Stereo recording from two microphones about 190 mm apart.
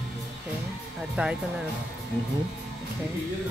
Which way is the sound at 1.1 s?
5° right (ahead or behind).